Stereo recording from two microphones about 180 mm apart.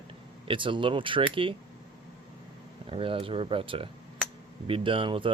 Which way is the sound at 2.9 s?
30° right (ahead or behind).